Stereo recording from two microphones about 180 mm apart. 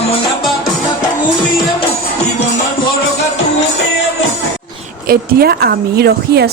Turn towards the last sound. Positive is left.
turn(degrees=-65)  # may be behind; listen again after turning